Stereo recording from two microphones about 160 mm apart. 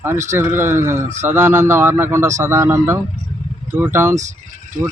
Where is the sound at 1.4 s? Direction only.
15° right (ahead or behind).